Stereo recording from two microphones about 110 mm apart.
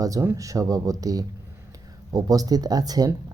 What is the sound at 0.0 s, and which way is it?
Speech, 30° right (ahead or behind).